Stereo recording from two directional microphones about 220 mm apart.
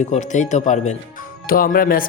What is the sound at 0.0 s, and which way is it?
Speech, 35° left (ahead or behind).